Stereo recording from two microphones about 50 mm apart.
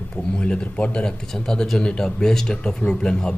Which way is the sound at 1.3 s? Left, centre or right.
Centre.